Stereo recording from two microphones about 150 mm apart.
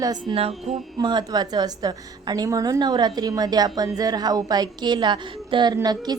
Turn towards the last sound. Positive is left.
turn(degrees=-25)  # may be behind; listen again after turning